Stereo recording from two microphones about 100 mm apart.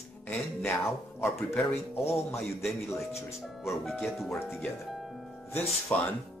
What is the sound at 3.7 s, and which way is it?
Speech, centre (ahead or behind).